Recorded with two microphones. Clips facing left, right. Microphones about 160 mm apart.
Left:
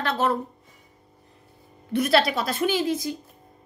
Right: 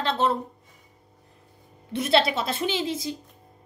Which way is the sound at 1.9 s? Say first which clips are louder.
Left 1 dB; 25° right (ahead or behind).